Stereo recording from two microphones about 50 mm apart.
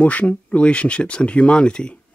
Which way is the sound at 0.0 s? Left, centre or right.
Left.